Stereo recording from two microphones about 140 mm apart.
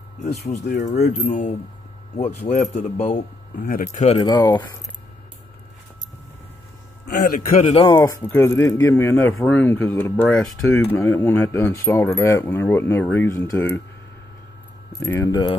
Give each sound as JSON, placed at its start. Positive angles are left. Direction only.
{"t": 0.2, "sound": "speech", "side_deg": 60}
{"t": 3.5, "sound": "speech", "side_deg": 90}
{"t": 4.3, "sound": "speech", "side_deg": 30}
{"t": 7.2, "sound": "a man's voice", "side_deg": 80}
{"t": 7.6, "sound": "speech", "side_deg": 40}
{"t": 7.9, "sound": "speech", "side_deg": 20}
{"t": 10.7, "sound": "speech", "side_deg": 15}
{"t": 15.0, "sound": "speech", "side_deg": 15}